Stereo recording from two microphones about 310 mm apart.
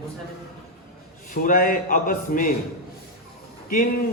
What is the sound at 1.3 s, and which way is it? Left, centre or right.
A man's voice, left.